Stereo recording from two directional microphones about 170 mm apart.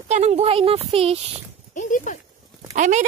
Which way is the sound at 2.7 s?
45° right (ahead or behind).